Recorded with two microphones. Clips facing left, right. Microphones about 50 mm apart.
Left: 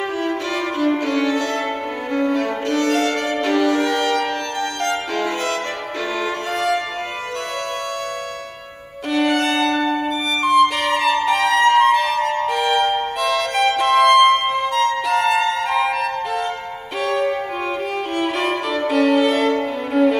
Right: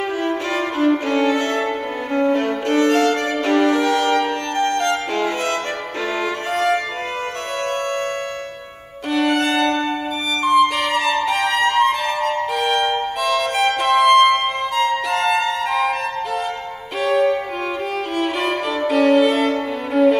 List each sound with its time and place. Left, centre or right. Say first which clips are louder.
0.2 s music: right 1 dB; right
9.1 s violin: even; centre
10.4 s music: even; centre
17.0 s music: right 3 dB; centre
18.1 s violin: even; centre